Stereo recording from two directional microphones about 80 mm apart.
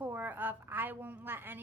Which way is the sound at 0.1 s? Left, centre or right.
Right.